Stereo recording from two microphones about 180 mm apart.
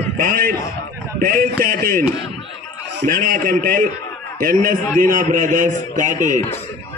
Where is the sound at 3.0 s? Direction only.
50° right (ahead or behind).